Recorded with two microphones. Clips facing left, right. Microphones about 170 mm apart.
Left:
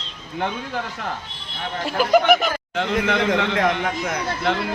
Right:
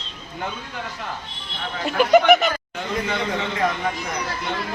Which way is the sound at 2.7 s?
75° left (ahead or behind).